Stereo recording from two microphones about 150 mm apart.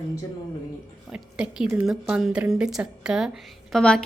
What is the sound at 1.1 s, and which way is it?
A woman's voice, 5° right (ahead or behind).